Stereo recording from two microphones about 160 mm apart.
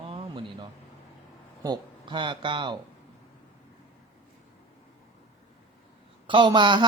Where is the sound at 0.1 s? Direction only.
30° right (ahead or behind).